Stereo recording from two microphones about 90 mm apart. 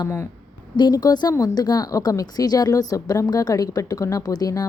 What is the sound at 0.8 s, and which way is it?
A woman's voice, 50° left (ahead or behind).